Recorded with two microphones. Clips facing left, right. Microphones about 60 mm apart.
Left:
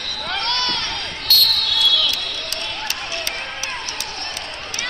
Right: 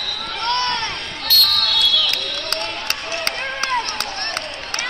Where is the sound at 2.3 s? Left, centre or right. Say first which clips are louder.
Right 3 dB; right.